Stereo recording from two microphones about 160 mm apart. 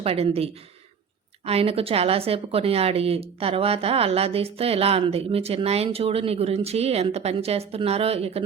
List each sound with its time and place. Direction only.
0.0 s a woman's voice: 40° right (ahead or behind)